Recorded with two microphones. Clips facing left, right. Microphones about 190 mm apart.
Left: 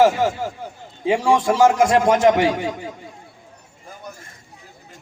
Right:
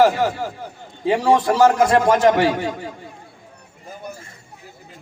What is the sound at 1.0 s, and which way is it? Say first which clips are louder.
A man's voice: right 1 dB; 15° left (ahead or behind).